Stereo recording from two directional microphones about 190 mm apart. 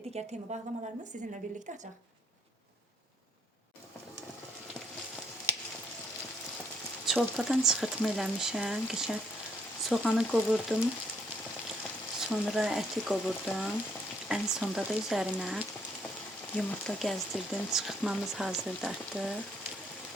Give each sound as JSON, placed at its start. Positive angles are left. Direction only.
{"t": 0.1, "sound": "a woman's voice", "side_deg": -35}
{"t": 7.0, "sound": "speech", "side_deg": 0}
{"t": 12.3, "sound": "speech", "side_deg": -5}